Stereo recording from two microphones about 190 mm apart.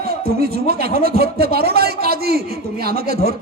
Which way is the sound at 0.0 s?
55° right (ahead or behind).